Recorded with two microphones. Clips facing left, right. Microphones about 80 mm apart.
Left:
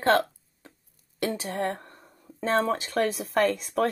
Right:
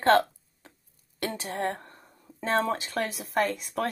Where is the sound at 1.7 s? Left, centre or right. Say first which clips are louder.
Even; centre.